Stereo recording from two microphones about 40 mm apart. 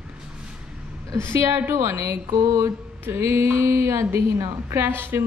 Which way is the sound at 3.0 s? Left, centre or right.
Right.